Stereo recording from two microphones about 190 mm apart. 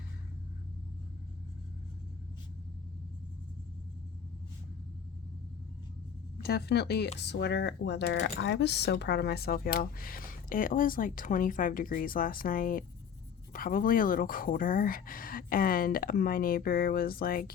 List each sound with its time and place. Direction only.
6.4 s speech: 60° left (ahead or behind)